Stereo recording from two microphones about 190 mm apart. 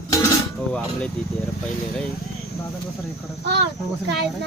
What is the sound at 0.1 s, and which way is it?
Dishes, 15° left (ahead or behind).